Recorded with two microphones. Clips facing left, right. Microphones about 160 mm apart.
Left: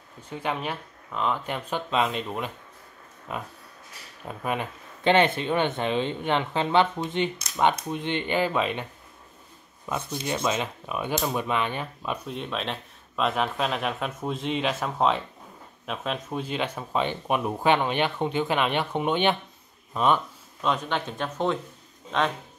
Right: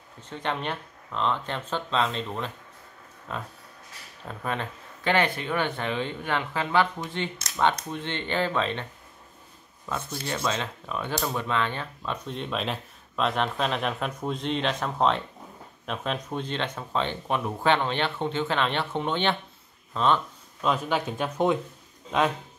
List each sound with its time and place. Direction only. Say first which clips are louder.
0.3 s speech: left 1 dB; 10° left (ahead or behind)
9.8 s speech: left 2 dB; 15° left (ahead or behind)
12.3 s speech: right 1 dB; centre (ahead or behind)
20.6 s speech: right 1 dB; 5° right (ahead or behind)